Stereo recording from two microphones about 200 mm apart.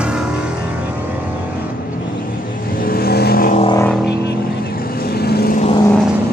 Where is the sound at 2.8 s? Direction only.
50° left (ahead or behind).